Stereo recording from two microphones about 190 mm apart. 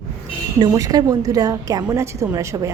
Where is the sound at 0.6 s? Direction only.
20° right (ahead or behind).